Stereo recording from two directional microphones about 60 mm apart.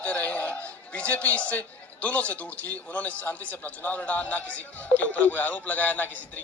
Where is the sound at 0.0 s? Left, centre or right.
Left.